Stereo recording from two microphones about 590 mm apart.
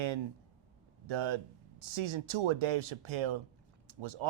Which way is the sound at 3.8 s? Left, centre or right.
Right.